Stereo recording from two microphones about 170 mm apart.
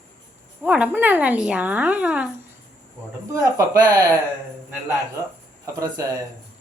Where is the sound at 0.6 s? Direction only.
10° right (ahead or behind).